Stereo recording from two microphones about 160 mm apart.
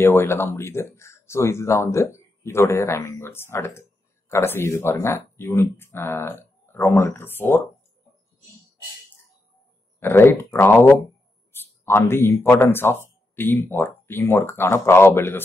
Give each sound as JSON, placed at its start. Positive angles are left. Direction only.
{"t": 0.0, "sound": "speech", "side_deg": 15}
{"t": 9.9, "sound": "speech", "side_deg": 15}